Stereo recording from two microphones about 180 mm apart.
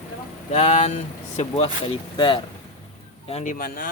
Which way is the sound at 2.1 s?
25° left (ahead or behind).